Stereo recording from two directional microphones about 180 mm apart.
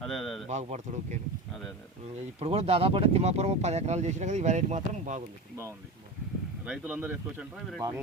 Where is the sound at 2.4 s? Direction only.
35° right (ahead or behind).